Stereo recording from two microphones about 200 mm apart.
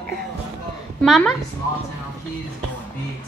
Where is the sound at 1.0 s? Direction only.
Centre (ahead or behind).